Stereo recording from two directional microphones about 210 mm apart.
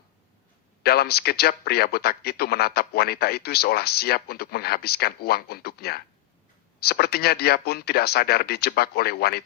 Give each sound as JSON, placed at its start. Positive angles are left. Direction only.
{"t": 0.8, "sound": "a man's voice", "side_deg": 50}